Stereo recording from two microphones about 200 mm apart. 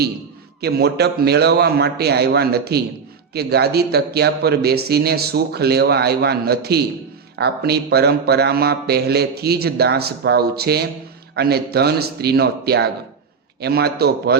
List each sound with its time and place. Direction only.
0.6 s speech: 55° right (ahead or behind)